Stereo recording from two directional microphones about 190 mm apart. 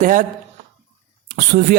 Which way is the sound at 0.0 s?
45° right (ahead or behind).